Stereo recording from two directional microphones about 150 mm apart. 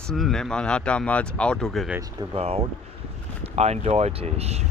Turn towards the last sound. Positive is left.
turn(degrees=-45)  # may be behind; listen again after turning